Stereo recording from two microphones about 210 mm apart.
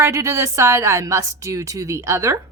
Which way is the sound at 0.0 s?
15° right (ahead or behind).